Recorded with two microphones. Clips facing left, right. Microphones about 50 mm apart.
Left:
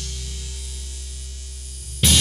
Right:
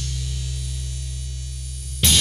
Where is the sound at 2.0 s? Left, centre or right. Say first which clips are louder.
Left 1 dB; centre.